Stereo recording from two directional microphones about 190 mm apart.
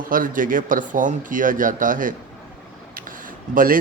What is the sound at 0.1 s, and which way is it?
Speech, 45° right (ahead or behind).